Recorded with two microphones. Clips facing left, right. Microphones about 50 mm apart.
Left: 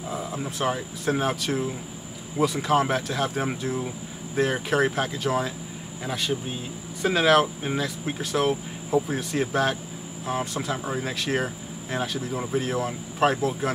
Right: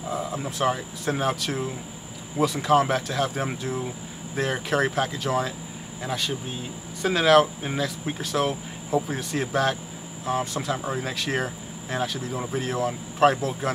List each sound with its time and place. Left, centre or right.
0.0 s speech: centre